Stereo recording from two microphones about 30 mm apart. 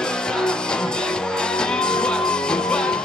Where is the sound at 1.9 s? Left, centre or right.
Left.